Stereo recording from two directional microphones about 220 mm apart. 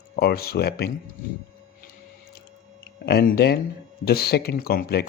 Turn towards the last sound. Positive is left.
turn(degrees=45)  # may be behind; listen again after turning